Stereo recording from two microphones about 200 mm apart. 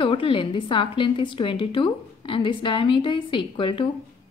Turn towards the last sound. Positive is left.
turn(degrees=25)  # may be behind; listen again after turning